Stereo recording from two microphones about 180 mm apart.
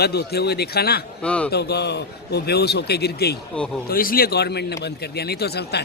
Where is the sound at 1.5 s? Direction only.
65° left (ahead or behind).